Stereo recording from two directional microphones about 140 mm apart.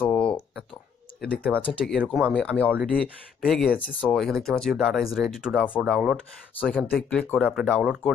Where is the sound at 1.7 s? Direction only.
5° left (ahead or behind).